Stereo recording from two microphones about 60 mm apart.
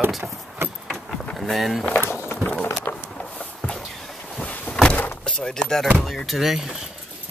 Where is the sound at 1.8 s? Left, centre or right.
Left.